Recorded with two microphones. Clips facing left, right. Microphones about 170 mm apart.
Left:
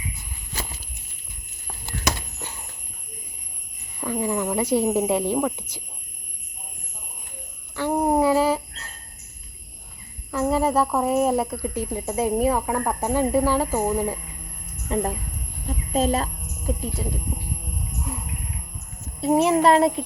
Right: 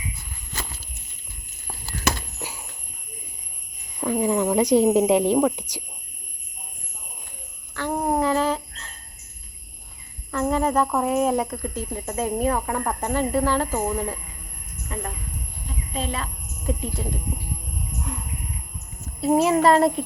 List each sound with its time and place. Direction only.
2.4 s a sound: 10° right (ahead or behind)
4.0 s speech: 15° right (ahead or behind)
7.8 s a sound: 15° left (ahead or behind)
10.3 s speech: 5° left (ahead or behind)
14.9 s speech: 30° left (ahead or behind)
15.9 s a woman's voice: 40° left (ahead or behind)
16.6 s speech: centre (ahead or behind)
18.1 s music: 5° left (ahead or behind)
19.2 s speech: centre (ahead or behind)